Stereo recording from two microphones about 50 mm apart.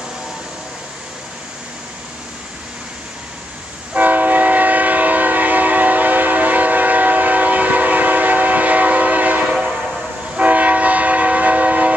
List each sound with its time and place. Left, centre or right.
3.9 s train: right
10.3 s train: right